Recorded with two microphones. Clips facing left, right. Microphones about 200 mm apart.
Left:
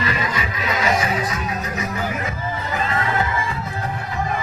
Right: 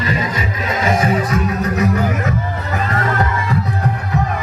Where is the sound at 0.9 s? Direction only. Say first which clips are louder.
Right 6 dB; 55° right (ahead or behind).